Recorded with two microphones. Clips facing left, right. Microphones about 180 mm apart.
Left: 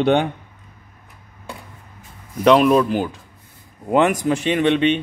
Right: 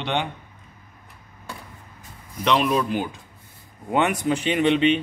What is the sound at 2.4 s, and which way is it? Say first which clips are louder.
Speech: left 8 dB; 45° left (ahead or behind).